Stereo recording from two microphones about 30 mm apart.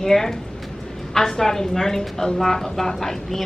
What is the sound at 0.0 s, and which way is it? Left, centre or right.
A woman's voice, centre.